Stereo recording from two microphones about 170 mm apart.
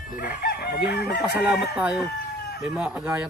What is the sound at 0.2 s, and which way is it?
Chicken, 60° left (ahead or behind).